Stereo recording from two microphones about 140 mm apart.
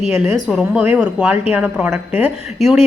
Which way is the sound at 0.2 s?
5° right (ahead or behind).